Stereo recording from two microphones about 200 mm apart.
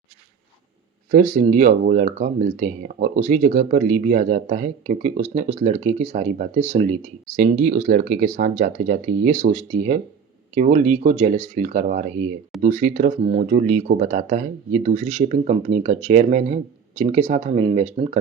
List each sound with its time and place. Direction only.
1.1 s speech: 40° right (ahead or behind)